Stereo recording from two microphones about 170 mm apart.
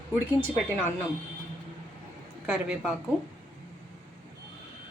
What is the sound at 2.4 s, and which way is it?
Speech, 5° right (ahead or behind).